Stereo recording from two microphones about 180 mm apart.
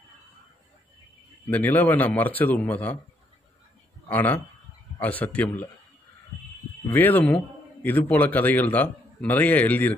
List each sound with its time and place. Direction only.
1.5 s a man's voice: 10° left (ahead or behind)
4.1 s a man's voice: 10° left (ahead or behind)
6.9 s a man's voice: 10° left (ahead or behind)